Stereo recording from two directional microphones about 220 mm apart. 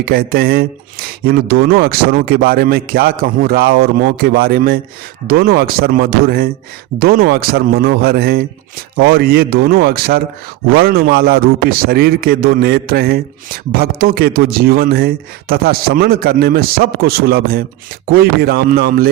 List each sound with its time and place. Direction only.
0.0 s a man's voice: 45° right (ahead or behind)